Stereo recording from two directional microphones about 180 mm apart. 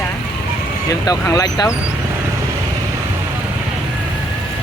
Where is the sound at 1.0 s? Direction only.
20° left (ahead or behind).